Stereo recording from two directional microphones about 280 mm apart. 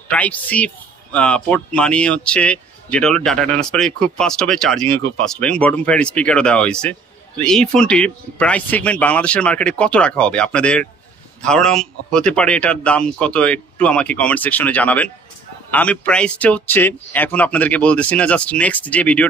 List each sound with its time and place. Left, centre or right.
0.1 s a man's voice: centre